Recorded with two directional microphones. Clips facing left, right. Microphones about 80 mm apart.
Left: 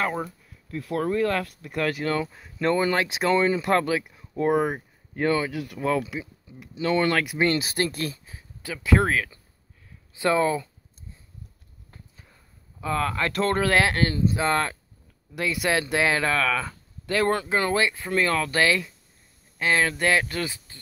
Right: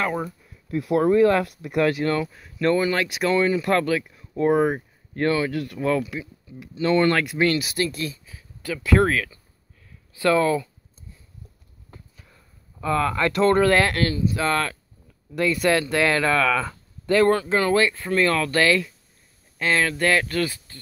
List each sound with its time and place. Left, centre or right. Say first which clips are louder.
0.2 s speech: right 2 dB; centre
2.3 s speech: right 2 dB; left
4.4 s speech: right 3 dB; centre
7.3 s speech: right 2 dB; left
7.7 s speech: right 1 dB; left
8.6 s speech: right 3 dB; centre
12.8 s speech: right 4 dB; centre
14.3 s speech: right 1 dB; left
15.3 s speech: right 4 dB; centre
17.3 s speech: right 4 dB; left